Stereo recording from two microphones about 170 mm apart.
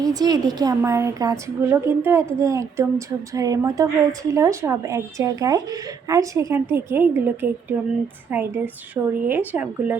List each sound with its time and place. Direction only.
0.0 s a woman's voice: 20° right (ahead or behind)